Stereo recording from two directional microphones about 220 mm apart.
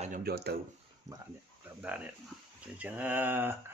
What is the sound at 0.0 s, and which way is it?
Speech, 40° right (ahead or behind).